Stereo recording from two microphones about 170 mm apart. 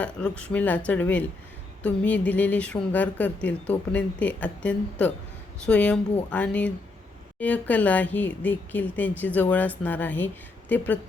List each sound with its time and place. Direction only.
0.0 s speech: 5° left (ahead or behind)